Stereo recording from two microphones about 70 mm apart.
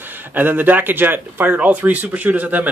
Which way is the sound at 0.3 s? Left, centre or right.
Right.